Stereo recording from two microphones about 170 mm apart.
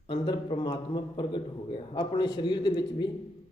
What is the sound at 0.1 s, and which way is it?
A man's voice, 30° left (ahead or behind).